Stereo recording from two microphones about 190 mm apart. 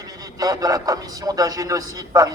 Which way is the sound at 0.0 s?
20° right (ahead or behind).